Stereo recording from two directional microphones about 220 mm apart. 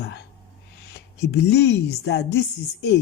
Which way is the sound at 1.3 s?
50° left (ahead or behind).